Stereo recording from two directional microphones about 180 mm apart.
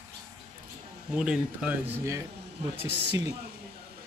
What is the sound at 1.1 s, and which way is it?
Speech, 5° right (ahead or behind).